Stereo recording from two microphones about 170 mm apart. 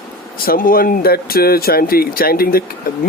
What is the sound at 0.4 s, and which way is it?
Speech, 55° left (ahead or behind).